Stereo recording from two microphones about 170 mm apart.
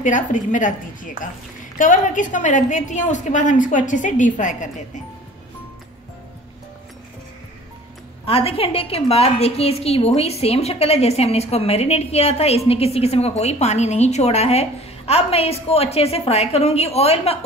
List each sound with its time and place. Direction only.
0.0 s a woman's voice: 50° left (ahead or behind)
8.3 s a woman's voice: 35° left (ahead or behind)